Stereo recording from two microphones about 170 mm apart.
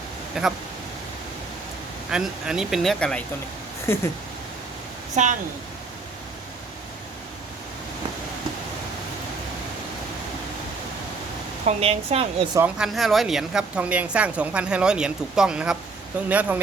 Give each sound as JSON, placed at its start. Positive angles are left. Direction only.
{"t": 0.4, "sound": "a woman's voice", "side_deg": -5}
{"t": 2.0, "sound": "a woman's voice", "side_deg": -5}
{"t": 5.1, "sound": "a woman's voice", "side_deg": -45}
{"t": 11.6, "sound": "a woman's voice", "side_deg": -35}
{"t": 12.5, "sound": "a woman's voice", "side_deg": -5}